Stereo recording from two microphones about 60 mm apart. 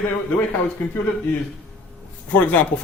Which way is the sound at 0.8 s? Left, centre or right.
Left.